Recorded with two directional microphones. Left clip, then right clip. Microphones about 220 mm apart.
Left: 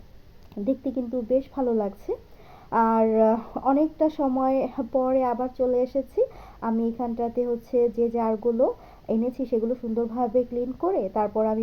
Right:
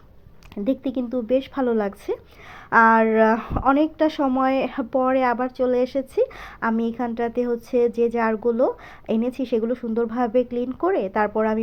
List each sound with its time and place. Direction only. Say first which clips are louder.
0.6 s speech: right 3 dB; 20° right (ahead or behind)